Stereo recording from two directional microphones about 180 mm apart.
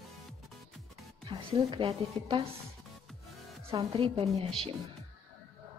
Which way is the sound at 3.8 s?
30° right (ahead or behind).